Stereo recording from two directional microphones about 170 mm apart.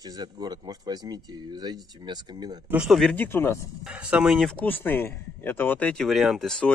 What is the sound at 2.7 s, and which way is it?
Speech, 5° right (ahead or behind).